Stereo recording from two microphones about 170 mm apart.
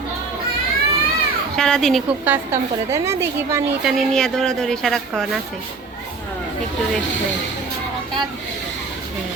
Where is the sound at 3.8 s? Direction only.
Centre (ahead or behind).